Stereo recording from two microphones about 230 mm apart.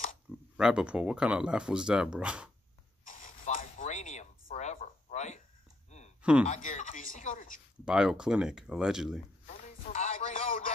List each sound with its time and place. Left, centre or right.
0.6 s speech: centre
3.1 s a sound: left
7.8 s speech: centre
9.6 s music: left